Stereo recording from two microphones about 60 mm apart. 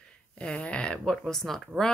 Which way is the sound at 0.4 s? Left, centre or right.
Centre.